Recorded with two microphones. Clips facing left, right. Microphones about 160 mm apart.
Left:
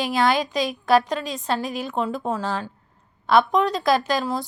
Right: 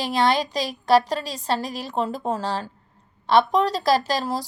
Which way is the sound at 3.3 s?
Centre (ahead or behind).